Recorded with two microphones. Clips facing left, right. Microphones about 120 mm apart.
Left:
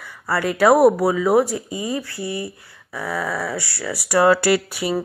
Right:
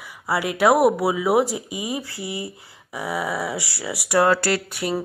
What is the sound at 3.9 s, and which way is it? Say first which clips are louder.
Speech: left 2 dB; centre (ahead or behind).